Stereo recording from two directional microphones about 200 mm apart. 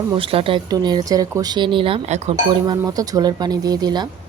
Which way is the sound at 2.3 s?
20° right (ahead or behind).